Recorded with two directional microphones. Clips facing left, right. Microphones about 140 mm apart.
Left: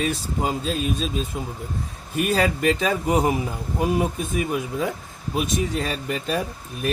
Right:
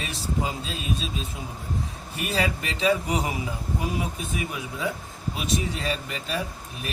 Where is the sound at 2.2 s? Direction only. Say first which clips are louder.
Left 6 dB; 45° left (ahead or behind).